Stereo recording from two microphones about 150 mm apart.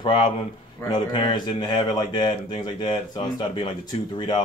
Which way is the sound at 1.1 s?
30° left (ahead or behind).